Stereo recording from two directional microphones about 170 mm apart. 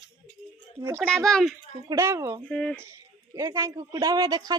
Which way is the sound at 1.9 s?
15° right (ahead or behind).